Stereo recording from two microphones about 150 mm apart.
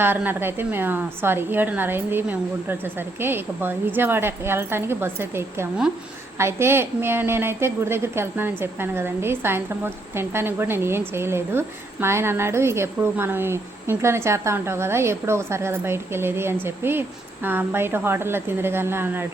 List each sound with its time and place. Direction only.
0.0 s a woman's voice: 15° right (ahead or behind)